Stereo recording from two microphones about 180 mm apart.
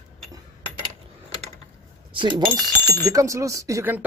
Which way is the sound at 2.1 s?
25° right (ahead or behind).